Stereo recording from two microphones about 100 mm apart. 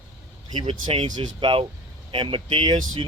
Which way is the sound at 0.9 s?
55° right (ahead or behind).